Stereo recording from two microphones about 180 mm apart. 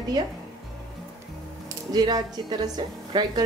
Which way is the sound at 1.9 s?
20° right (ahead or behind).